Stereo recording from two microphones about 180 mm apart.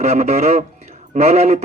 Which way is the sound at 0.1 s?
40° right (ahead or behind).